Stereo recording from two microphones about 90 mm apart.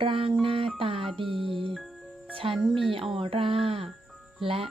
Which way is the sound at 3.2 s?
80° right.